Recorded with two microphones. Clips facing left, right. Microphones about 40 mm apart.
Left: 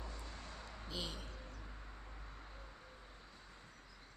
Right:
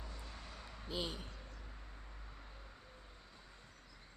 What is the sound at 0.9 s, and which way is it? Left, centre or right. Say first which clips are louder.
Speech: right 4 dB; centre.